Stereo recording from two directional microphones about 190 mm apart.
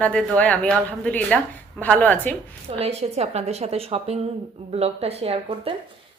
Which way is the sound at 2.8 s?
35° right (ahead or behind).